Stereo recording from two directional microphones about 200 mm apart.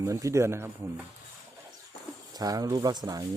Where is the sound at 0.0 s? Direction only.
15° right (ahead or behind).